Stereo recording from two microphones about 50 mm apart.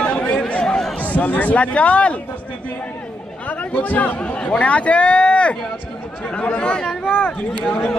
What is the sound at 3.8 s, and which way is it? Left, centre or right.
A man's voice, left.